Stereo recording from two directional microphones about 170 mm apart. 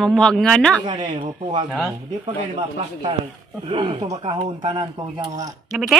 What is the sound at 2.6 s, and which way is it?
Speech, 35° right (ahead or behind).